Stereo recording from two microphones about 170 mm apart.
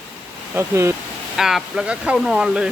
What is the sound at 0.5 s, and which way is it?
Speech, 15° right (ahead or behind).